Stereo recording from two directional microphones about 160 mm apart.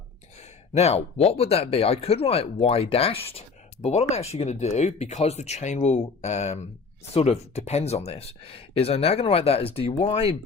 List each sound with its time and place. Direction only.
0.7 s speech: 40° left (ahead or behind)